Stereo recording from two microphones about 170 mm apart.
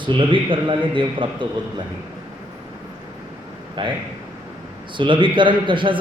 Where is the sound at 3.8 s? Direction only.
25° right (ahead or behind).